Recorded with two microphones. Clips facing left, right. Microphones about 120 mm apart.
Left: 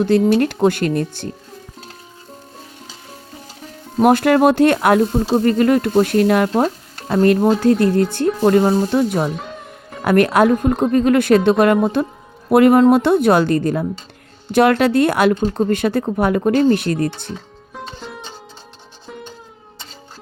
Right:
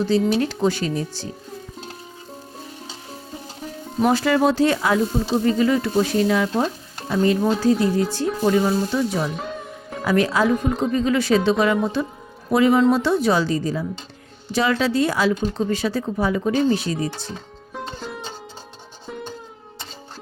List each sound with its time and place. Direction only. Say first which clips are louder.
0.0 s speech: left 5 dB; 55° left (ahead or behind)
4.0 s speech: left 5 dB; 55° left (ahead or behind)
17.7 s music: right 1 dB; centre (ahead or behind)